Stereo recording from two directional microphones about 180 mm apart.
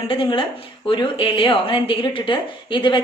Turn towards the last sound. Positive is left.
turn(degrees=25)  # may be behind; listen again after turning